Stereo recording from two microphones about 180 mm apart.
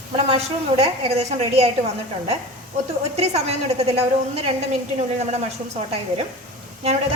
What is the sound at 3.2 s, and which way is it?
A woman's voice, 35° right (ahead or behind).